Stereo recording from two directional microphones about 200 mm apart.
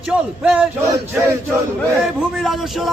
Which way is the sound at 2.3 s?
Centre (ahead or behind).